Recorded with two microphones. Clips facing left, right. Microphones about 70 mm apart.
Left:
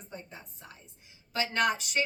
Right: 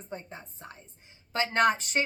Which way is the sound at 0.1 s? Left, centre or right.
Right.